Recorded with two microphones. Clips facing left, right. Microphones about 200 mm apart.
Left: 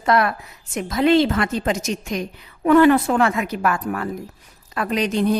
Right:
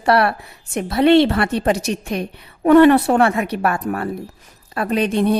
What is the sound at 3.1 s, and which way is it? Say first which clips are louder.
Speech: right 3 dB; 35° right (ahead or behind).